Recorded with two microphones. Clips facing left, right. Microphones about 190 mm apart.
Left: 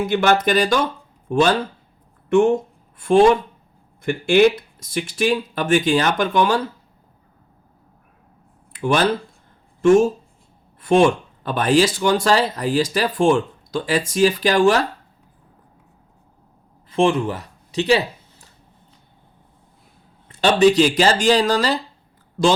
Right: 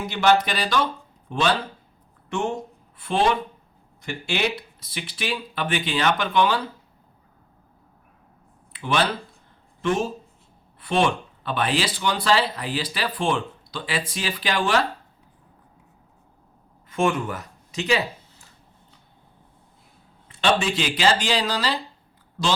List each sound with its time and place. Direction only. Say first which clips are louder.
0.0 s speech: left 3 dB; 50° left (ahead or behind)
3.0 s speech: left 9 dB; 45° left (ahead or behind)
8.7 s a sound: left 5 dB; 45° left (ahead or behind)
9.8 s speech: left 11 dB; 45° left (ahead or behind)
16.9 s speech: left 5 dB; 30° left (ahead or behind)
20.2 s speech: left 8 dB; 40° left (ahead or behind)